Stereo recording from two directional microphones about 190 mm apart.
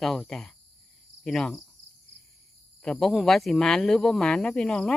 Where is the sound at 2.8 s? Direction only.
5° left (ahead or behind).